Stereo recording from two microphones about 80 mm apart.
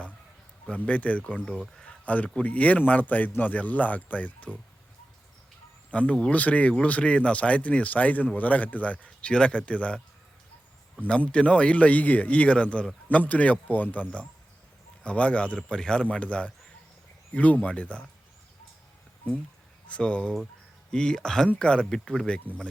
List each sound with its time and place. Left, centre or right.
0.9 s a man's voice: centre
5.9 s speech: centre
11.0 s speech: centre
19.9 s speech: centre